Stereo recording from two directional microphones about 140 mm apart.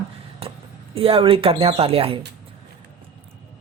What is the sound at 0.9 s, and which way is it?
Speech, 40° right (ahead or behind).